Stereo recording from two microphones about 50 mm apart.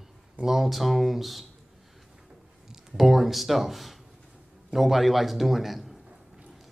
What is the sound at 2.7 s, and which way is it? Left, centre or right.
Speech, centre.